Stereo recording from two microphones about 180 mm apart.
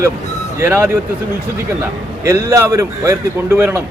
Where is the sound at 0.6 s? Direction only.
15° right (ahead or behind).